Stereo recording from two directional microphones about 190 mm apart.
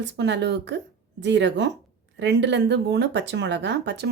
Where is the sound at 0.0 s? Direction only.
65° right (ahead or behind).